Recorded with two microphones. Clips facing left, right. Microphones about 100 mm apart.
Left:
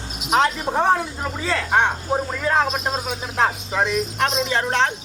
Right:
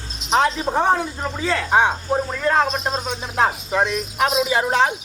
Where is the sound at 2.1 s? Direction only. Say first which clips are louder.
Right 1 dB; 5° left (ahead or behind).